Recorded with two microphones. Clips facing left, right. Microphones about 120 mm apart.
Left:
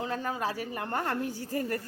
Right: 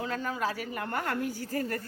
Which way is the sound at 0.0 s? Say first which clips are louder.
Even; 25° left (ahead or behind).